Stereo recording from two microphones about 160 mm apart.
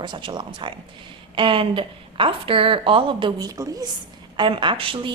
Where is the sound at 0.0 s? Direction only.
30° right (ahead or behind).